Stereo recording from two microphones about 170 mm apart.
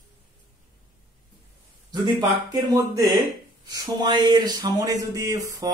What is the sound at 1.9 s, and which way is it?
Speech, 25° right (ahead or behind).